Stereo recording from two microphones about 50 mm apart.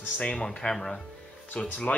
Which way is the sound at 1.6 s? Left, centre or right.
Left.